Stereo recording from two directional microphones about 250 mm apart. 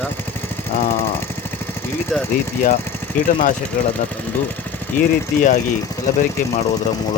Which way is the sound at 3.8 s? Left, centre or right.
Left.